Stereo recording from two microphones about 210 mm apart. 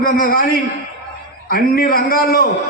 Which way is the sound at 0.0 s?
45° left (ahead or behind).